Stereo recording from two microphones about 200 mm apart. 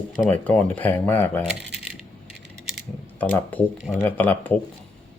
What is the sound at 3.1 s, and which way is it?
Speech, 10° left (ahead or behind).